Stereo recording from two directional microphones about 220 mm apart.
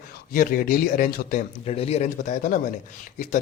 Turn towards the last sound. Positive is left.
turn(degrees=35)  # may be behind; listen again after turning